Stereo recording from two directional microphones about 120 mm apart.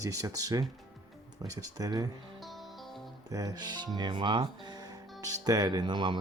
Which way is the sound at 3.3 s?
30° right (ahead or behind).